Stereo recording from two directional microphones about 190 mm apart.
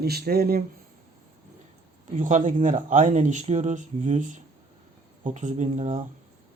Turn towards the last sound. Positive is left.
turn(degrees=-40)  # may be behind; listen again after turning